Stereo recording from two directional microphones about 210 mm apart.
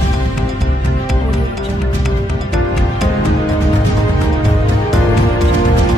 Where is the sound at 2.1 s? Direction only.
Centre (ahead or behind).